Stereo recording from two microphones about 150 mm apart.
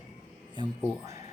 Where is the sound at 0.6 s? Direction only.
20° right (ahead or behind).